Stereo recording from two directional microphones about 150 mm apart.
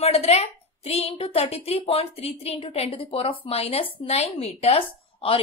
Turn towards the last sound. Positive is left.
turn(degrees=40)  # may be behind; listen again after turning